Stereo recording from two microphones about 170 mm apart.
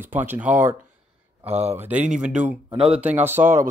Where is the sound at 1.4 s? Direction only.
35° right (ahead or behind).